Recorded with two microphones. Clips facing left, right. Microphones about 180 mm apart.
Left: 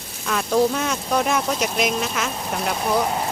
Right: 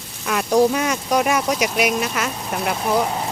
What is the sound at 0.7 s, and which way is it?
Speech, 10° right (ahead or behind).